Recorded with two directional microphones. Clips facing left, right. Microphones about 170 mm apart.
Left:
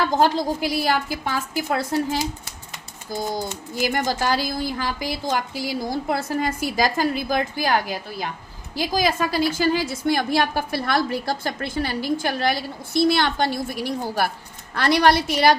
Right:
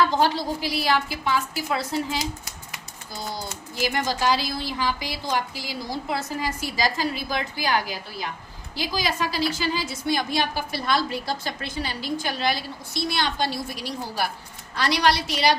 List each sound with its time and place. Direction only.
0.2 s a woman's voice: 45° left (ahead or behind)